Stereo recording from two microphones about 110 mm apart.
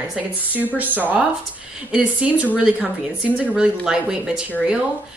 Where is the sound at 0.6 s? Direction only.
15° right (ahead or behind).